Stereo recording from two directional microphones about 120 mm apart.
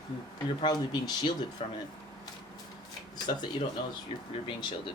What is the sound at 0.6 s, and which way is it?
Speech, 35° left (ahead or behind).